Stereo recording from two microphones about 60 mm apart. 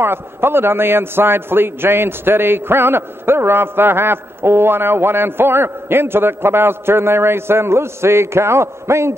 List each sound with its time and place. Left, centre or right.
0.0 s a man's voice: right